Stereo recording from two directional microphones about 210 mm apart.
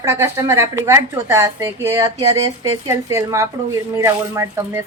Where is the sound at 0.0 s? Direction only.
10° right (ahead or behind).